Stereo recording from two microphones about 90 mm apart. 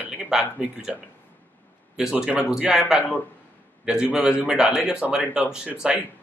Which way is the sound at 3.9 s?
10° right (ahead or behind).